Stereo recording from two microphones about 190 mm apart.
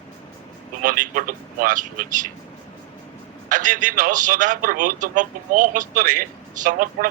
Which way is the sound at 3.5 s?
45° right (ahead or behind).